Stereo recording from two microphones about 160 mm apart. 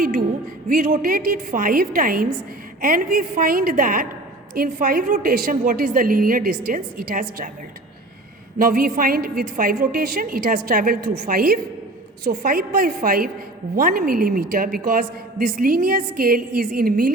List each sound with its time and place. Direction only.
0.7 s a woman's voice: 60° right (ahead or behind)
8.5 s a woman's voice: 65° right (ahead or behind)